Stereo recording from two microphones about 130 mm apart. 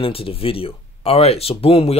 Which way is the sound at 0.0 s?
45° left (ahead or behind).